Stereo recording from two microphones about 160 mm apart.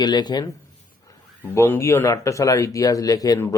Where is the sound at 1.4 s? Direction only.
15° left (ahead or behind).